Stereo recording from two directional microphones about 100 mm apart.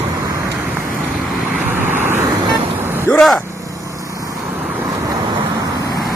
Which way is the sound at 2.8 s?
20° right (ahead or behind).